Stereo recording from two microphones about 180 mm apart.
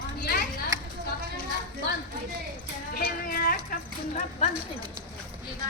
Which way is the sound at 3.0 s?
55° left (ahead or behind).